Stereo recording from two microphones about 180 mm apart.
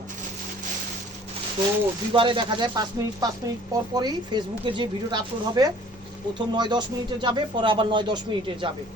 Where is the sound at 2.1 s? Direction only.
30° right (ahead or behind).